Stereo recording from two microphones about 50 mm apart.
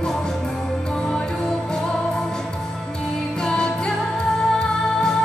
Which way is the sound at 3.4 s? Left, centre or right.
Centre.